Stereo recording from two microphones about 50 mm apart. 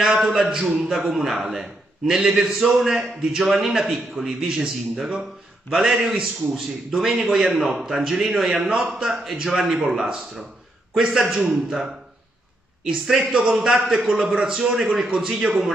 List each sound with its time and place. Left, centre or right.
0.0 s a man's voice: centre
12.8 s a man's voice: centre
13.3 s a man's voice: right
13.6 s a man's voice: centre